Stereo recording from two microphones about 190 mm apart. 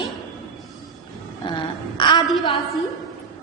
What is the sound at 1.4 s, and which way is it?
Speech, 25° left (ahead or behind).